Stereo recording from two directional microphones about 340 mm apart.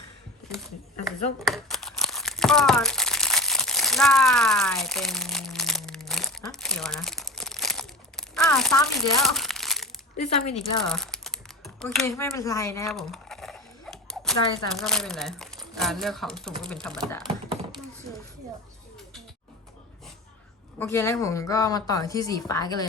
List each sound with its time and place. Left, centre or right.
1.0 s crumpling: centre
10.8 s speech: centre
17.2 s thunk: centre
20.7 s a woman's voice: centre